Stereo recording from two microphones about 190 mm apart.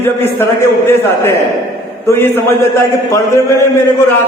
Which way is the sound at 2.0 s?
15° left (ahead or behind).